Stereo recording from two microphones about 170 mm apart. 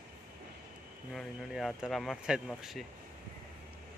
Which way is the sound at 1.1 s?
Centre (ahead or behind).